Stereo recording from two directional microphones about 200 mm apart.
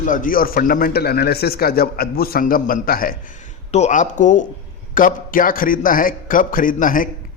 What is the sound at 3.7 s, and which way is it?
A man's voice, 35° left (ahead or behind).